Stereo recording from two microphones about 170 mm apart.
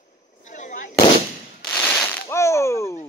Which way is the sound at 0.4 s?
50° left (ahead or behind).